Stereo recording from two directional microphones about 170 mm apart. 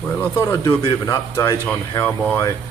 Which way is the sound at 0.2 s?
15° left (ahead or behind).